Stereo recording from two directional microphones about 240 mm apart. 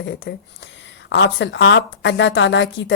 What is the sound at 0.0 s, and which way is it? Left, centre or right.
A woman's voice, left.